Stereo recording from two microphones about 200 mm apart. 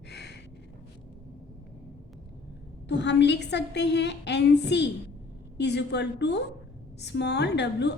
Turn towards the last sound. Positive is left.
turn(degrees=60)  # may be behind; listen again after turning